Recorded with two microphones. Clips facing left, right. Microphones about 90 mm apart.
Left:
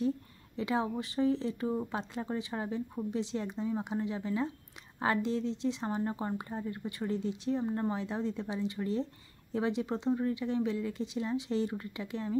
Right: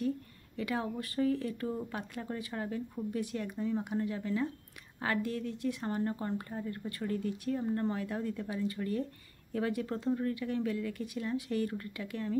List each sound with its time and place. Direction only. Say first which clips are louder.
0.6 s speech: left 3 dB; 25° left (ahead or behind)